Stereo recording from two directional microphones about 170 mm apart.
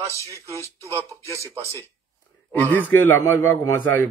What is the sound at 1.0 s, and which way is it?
Speech, 15° left (ahead or behind).